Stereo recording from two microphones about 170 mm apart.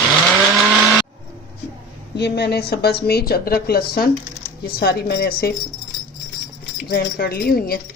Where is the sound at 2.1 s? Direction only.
75° left (ahead or behind).